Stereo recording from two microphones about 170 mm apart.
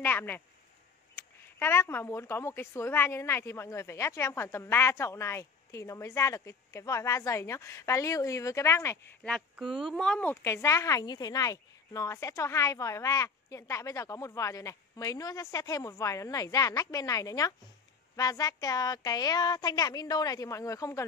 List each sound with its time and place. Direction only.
0.0 s a sound: 10° left (ahead or behind)
1.1 s speech: 15° left (ahead or behind)
9.8 s speech: centre (ahead or behind); by 21.0 s 20° left (ahead or behind)